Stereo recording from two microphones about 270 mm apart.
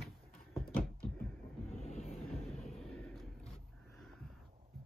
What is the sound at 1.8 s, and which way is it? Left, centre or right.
Train, left.